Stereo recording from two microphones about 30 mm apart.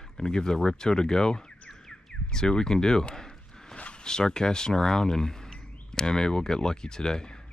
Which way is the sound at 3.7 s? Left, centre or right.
Left.